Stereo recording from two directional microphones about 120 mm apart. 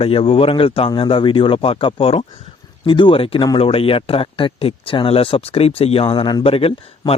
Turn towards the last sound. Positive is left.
turn(degrees=55)  # may be behind; listen again after turning